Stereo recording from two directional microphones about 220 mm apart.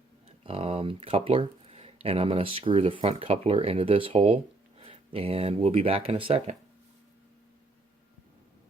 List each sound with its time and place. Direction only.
0.3 s speech: 25° right (ahead or behind)